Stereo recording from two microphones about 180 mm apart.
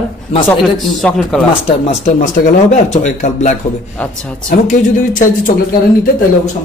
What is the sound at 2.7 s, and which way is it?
Speech, 40° left (ahead or behind).